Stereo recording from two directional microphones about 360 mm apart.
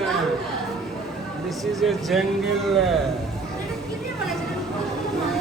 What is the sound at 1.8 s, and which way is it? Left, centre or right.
Speech, centre.